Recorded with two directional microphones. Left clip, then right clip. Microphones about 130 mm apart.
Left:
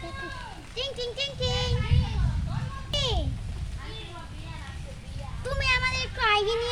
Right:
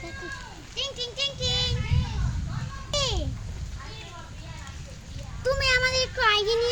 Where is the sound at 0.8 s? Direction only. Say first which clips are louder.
Right 1 dB; 20° left (ahead or behind).